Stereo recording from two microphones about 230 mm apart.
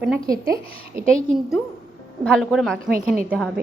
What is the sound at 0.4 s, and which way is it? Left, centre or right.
Speech, right.